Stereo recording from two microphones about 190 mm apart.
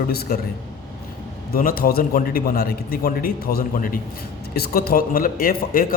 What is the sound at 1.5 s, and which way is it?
A man's voice, 50° left (ahead or behind).